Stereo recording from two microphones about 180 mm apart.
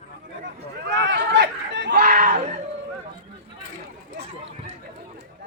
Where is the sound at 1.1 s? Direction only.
80° right.